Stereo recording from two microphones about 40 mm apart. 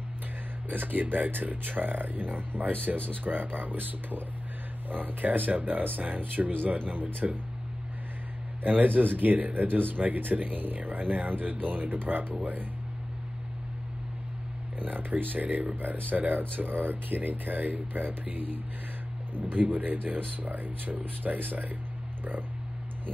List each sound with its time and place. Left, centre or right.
0.7 s speech: right
7.2 s speech: right
8.6 s speech: right
14.8 s speech: right